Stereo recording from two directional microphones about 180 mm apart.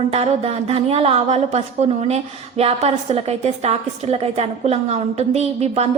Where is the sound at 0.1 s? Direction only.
35° right (ahead or behind).